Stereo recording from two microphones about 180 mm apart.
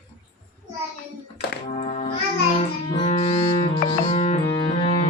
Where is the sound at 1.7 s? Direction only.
40° left (ahead or behind).